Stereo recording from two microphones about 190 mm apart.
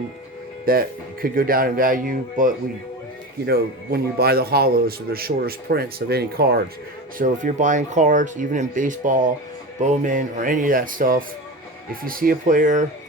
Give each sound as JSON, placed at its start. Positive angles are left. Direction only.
{"t": 0.6, "sound": "a man's voice", "side_deg": -50}
{"t": 7.2, "sound": "a man's voice", "side_deg": -40}